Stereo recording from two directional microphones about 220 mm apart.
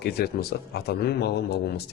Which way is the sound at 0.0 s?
45° left (ahead or behind).